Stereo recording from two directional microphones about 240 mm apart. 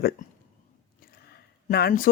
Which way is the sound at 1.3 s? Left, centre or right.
Left.